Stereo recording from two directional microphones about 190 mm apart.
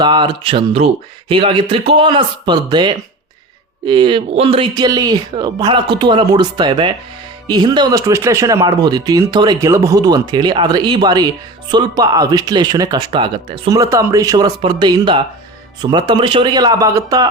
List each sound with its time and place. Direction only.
0.0 s speech: 25° right (ahead or behind)